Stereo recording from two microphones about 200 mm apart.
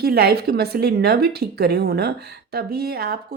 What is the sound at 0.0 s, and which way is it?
Speech, 50° right (ahead or behind).